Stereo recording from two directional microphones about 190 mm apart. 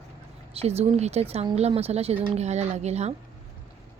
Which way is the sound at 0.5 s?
35° right (ahead or behind).